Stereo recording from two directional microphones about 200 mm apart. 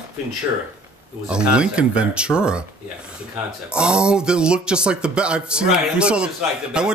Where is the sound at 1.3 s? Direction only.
5° right (ahead or behind).